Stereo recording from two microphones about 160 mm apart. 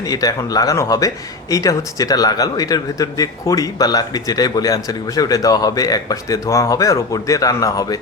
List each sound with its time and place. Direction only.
0.0 s speech: 25° left (ahead or behind)